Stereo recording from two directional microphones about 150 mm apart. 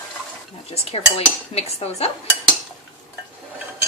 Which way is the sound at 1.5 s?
45° left (ahead or behind).